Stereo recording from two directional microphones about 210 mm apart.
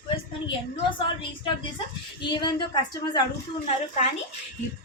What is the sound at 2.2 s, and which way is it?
A woman's voice, 20° left (ahead or behind).